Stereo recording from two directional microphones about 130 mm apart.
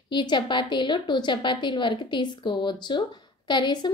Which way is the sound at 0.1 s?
35° left (ahead or behind).